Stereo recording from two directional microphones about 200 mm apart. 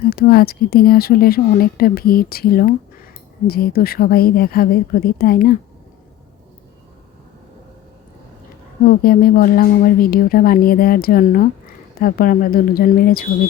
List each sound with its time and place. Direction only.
0.1 s speech: 50° left (ahead or behind)
8.9 s speech: 45° left (ahead or behind)